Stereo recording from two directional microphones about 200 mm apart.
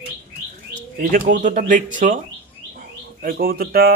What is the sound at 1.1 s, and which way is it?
Speech, 45° right (ahead or behind).